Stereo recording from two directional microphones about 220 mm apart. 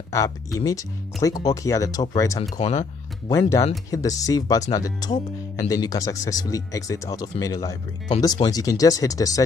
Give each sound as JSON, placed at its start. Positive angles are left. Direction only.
{"t": 0.1, "sound": "speech", "side_deg": 15}
{"t": 2.5, "sound": "speech", "side_deg": 30}
{"t": 3.3, "sound": "speech", "side_deg": 15}